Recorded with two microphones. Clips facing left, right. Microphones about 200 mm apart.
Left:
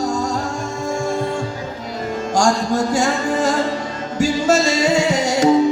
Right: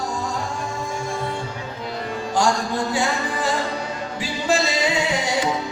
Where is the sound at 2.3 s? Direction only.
45° left (ahead or behind).